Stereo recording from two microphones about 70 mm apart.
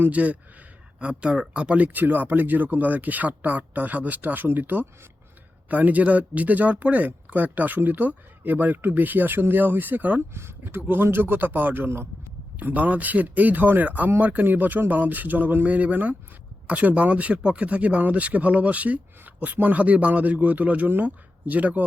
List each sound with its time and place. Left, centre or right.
0.0 s speech: right
10.3 s speech: right